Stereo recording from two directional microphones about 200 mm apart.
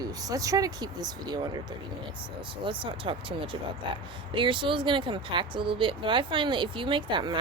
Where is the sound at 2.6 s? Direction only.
25° right (ahead or behind).